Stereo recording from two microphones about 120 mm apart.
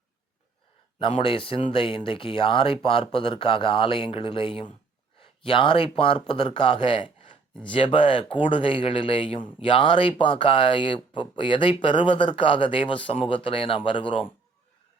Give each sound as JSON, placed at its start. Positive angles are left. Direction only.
{"t": 0.9, "sound": "speech", "side_deg": 45}